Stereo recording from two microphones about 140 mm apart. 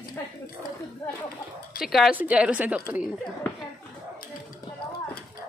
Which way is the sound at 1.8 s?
Centre (ahead or behind).